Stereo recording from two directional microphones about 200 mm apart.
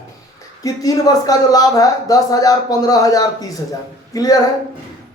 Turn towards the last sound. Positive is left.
turn(degrees=20)  # may be behind; listen again after turning